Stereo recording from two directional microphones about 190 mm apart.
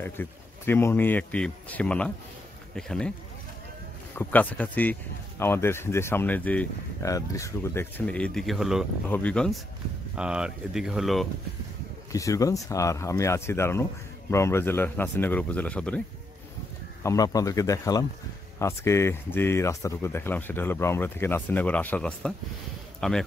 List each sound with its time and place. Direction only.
0.0 s speech: 10° left (ahead or behind)
4.1 s speech: 10° left (ahead or behind)
12.1 s speech: 15° left (ahead or behind)
17.0 s speech: 15° left (ahead or behind)